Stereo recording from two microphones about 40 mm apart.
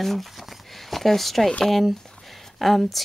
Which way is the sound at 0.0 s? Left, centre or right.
Centre.